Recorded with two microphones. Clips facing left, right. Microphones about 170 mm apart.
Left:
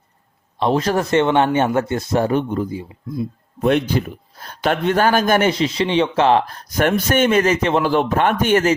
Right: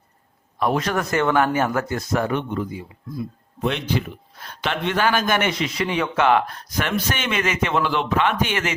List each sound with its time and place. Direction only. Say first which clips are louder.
0.6 s speech: left 4 dB; 30° left (ahead or behind)
3.6 s speech: left 6 dB; 50° left (ahead or behind)